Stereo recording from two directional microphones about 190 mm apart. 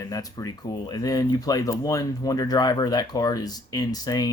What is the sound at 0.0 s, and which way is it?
Speech, 20° left (ahead or behind).